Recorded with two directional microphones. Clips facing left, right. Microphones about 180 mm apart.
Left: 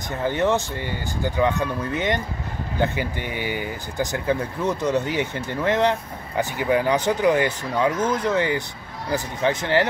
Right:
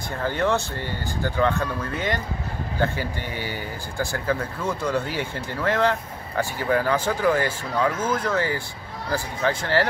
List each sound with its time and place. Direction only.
0.2 s speech: 20° left (ahead or behind)